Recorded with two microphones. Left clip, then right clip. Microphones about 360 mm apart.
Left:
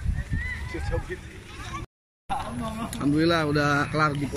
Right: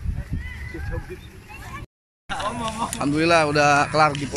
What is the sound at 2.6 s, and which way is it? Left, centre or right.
Speech, centre.